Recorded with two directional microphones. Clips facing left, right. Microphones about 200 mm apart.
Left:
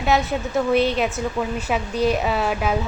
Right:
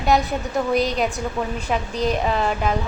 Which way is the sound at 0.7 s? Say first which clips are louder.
Left 2 dB; 40° right (ahead or behind).